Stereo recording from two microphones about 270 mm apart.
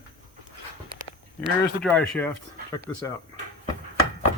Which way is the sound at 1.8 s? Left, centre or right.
Centre.